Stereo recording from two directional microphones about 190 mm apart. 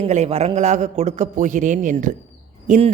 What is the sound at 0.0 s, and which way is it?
A man's voice, 35° right (ahead or behind).